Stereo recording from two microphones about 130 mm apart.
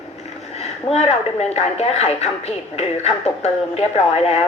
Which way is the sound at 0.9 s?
55° left (ahead or behind).